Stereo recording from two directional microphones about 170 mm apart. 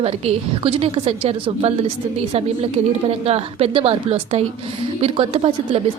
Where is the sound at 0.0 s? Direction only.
35° right (ahead or behind).